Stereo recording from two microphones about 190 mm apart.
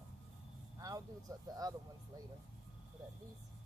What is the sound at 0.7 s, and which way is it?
Vehicle, 20° right (ahead or behind).